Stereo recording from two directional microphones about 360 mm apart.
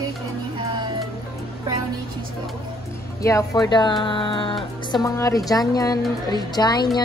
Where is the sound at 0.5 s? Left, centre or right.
Centre.